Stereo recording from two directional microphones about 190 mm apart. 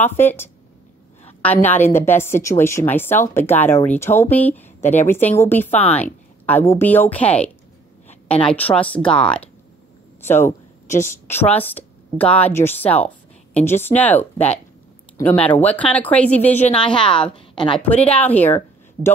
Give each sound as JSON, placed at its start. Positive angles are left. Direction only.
{"t": 0.2, "sound": "a woman's voice", "side_deg": 10}
{"t": 15.6, "sound": "speech", "side_deg": 5}
{"t": 16.6, "sound": "a woman's voice", "side_deg": 30}
{"t": 17.8, "sound": "speech", "side_deg": 5}